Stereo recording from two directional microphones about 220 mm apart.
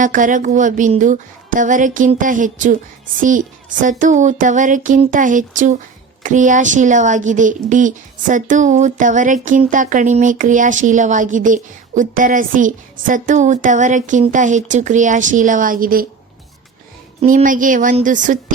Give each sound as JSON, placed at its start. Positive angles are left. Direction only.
{"t": 0.0, "sound": "speech", "side_deg": -35}
{"t": 17.2, "sound": "speech", "side_deg": -35}